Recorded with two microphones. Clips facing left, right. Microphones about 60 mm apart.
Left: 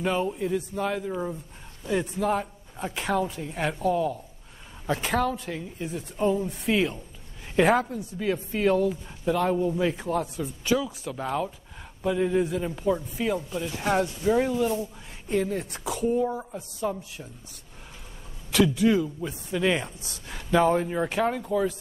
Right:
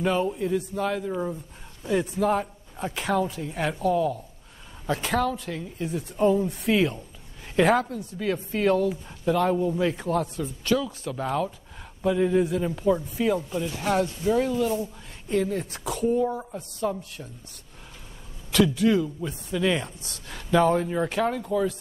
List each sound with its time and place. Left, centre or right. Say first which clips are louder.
0.0 s a woman's voice: right 2 dB; centre
13.6 s a woman's voice: right 1 dB; centre
18.5 s speech: even; centre